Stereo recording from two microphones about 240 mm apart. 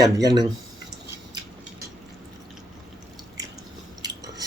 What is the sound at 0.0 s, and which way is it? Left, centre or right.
Speech, centre.